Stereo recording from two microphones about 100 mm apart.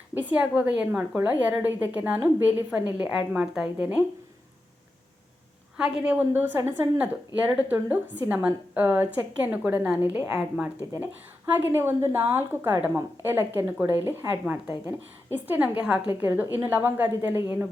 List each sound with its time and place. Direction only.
0.1 s a woman's voice: 15° right (ahead or behind)
5.7 s a woman's voice: 10° right (ahead or behind)
11.5 s a woman's voice: 20° right (ahead or behind)